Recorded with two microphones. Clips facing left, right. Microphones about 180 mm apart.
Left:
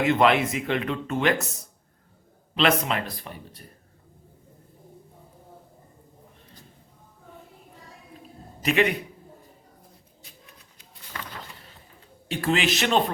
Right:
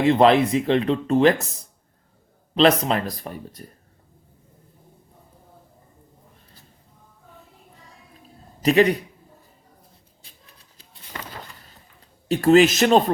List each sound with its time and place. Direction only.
0.0 s speech: 35° right (ahead or behind)
2.6 s speech: 35° right (ahead or behind)
8.6 s speech: 35° right (ahead or behind)
10.2 s a sound: 30° right (ahead or behind)
12.3 s speech: 40° right (ahead or behind)